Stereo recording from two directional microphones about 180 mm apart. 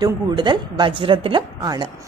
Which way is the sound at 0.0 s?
25° right (ahead or behind).